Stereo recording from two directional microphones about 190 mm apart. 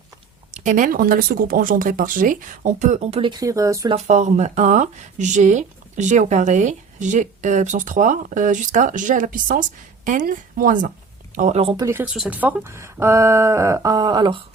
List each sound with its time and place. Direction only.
0.5 s speech: 40° right (ahead or behind); by 3.9 s 20° right (ahead or behind)
3.9 s speech: 40° right (ahead or behind)
11.8 s speech: 10° right (ahead or behind)